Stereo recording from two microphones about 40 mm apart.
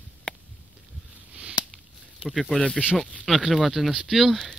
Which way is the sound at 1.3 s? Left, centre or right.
Right.